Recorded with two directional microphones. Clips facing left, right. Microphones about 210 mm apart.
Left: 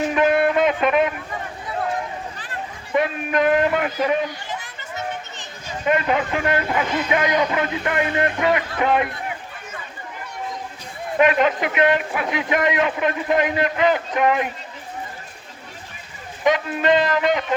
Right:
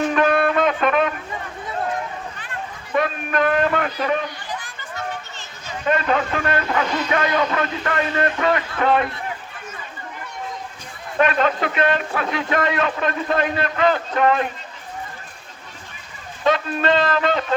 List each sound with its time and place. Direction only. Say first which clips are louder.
0.0 s music: even; 20° left (ahead or behind)
2.9 s speech: left 1 dB; 20° left (ahead or behind)
11.2 s a man's voice: left 1 dB; 15° left (ahead or behind)
16.4 s a man's voice: even; 15° left (ahead or behind)